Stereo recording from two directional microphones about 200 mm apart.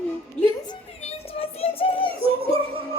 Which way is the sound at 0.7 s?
30° left (ahead or behind).